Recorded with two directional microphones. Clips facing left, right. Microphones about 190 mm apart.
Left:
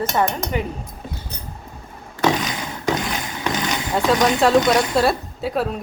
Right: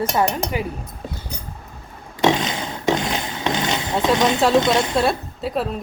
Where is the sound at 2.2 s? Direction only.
25° right (ahead or behind).